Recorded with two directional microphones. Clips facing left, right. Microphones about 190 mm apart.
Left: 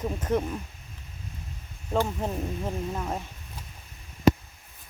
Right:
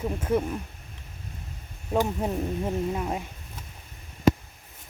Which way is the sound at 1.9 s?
10° right (ahead or behind).